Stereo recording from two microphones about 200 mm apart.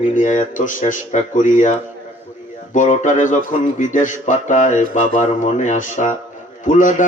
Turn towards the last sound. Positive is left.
turn(degrees=40)  # may be behind; listen again after turning